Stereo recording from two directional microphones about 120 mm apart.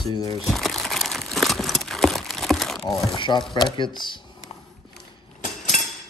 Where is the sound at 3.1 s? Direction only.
45° left (ahead or behind).